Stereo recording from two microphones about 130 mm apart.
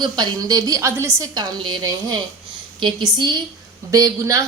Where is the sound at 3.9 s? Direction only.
25° right (ahead or behind).